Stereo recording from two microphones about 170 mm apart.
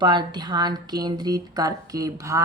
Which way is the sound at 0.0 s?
25° right (ahead or behind).